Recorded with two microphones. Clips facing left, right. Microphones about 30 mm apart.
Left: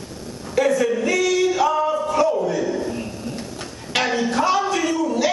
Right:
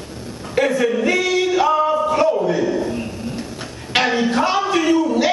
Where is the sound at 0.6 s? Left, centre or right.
Right.